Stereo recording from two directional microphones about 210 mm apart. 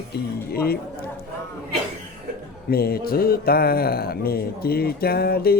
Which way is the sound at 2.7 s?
45° left (ahead or behind).